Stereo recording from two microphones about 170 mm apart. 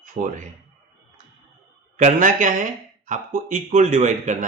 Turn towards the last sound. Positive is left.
turn(degrees=-45)  # may be behind; listen again after turning